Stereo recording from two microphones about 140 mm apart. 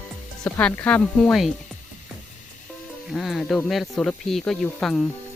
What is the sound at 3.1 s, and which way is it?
Speech, centre (ahead or behind).